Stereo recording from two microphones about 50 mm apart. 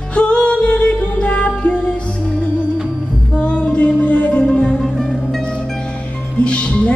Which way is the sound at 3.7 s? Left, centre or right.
Left.